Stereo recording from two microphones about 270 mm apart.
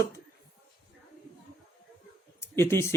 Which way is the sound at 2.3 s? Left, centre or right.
Centre.